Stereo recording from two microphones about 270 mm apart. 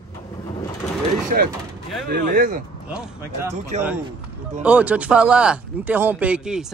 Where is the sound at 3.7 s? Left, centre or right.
Right.